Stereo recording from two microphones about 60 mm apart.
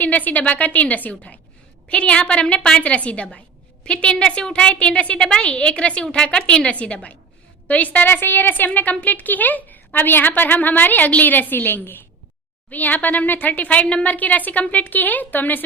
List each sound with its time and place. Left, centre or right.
0.0 s a woman's voice: left